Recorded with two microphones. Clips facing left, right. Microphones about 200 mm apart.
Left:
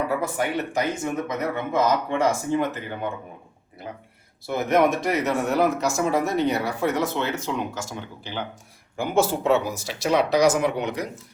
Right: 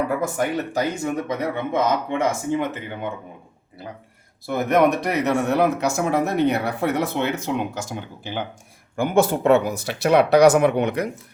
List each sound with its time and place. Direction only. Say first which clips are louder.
0.1 s speech: right 2 dB; 45° right (ahead or behind)
1.3 s speech: right 2 dB; 25° right (ahead or behind)
4.5 s speech: right 2 dB; 60° right (ahead or behind)